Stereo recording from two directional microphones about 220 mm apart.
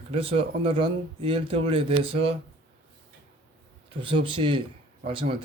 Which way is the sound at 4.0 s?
20° right (ahead or behind).